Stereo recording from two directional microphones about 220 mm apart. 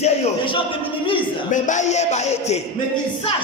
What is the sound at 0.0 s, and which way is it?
Speech, 25° left (ahead or behind).